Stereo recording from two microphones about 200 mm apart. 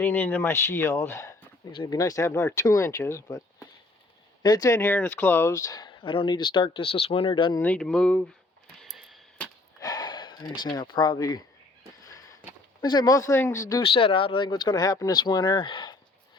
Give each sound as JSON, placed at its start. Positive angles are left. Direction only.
{"t": 0.0, "sound": "speech", "side_deg": 10}
{"t": 4.4, "sound": "speech", "side_deg": 15}
{"t": 7.6, "sound": "speech", "side_deg": 5}
{"t": 8.8, "sound": "a sound", "side_deg": 0}
{"t": 9.8, "sound": "speech", "side_deg": 20}
{"t": 12.8, "sound": "speech", "side_deg": 20}